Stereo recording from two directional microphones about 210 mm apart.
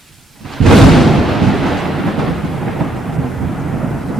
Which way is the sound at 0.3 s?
Centre (ahead or behind).